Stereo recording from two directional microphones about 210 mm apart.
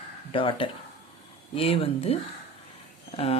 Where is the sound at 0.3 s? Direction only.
25° left (ahead or behind).